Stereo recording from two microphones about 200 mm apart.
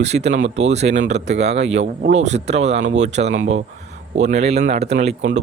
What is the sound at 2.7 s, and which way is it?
Speech, 70° right (ahead or behind).